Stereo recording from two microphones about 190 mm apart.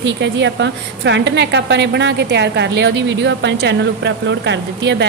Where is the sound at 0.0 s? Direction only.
70° right (ahead or behind).